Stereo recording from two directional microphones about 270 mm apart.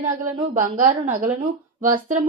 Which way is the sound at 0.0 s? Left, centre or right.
Right.